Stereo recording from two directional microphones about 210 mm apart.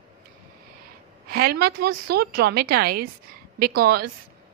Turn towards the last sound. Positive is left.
turn(degrees=-45)  # may be behind; listen again after turning